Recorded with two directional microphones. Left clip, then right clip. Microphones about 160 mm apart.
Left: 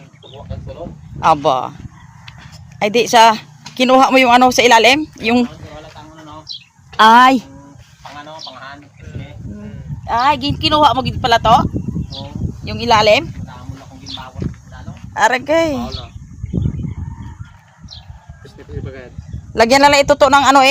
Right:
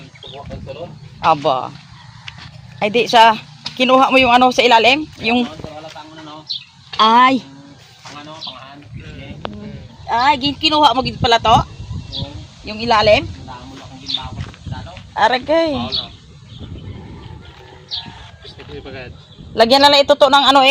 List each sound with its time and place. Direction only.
1.2 s speech: 30° left (ahead or behind)
2.7 s speech: 25° left (ahead or behind)
6.9 s speech: 55° left (ahead or behind)
10.1 s speech: centre (ahead or behind)
12.6 s speech: 10° left (ahead or behind)
15.4 s speech: 10° left (ahead or behind)
19.5 s speech: 40° left (ahead or behind)